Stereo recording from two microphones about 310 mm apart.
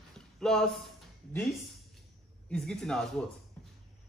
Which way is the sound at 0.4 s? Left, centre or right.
Centre.